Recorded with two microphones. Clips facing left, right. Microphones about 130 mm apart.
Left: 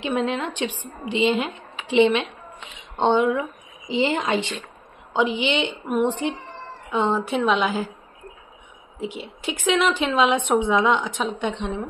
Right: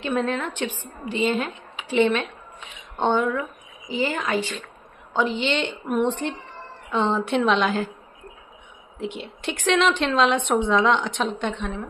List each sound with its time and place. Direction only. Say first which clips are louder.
0.0 s a woman's voice: left 1 dB; 15° left (ahead or behind)
9.0 s a woman's voice: even; 5° left (ahead or behind)
11.5 s speech: left 2 dB; 20° left (ahead or behind)